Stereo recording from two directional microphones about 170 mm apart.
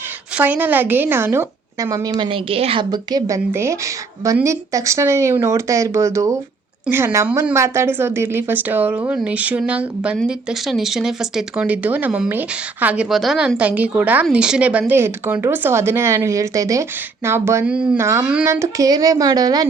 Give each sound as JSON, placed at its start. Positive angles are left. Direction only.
{"t": 0.3, "sound": "speech", "side_deg": -10}